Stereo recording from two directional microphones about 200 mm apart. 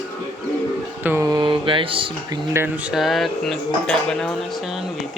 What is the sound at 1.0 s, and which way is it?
Speech, 15° right (ahead or behind).